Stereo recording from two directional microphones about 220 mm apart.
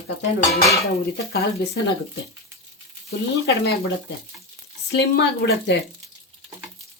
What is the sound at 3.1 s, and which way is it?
Speech, 45° left (ahead or behind).